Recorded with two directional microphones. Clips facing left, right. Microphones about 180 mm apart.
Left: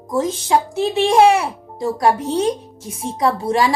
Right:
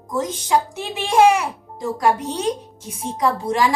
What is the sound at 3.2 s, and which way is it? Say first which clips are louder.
Speech: left 2 dB; 30° left (ahead or behind).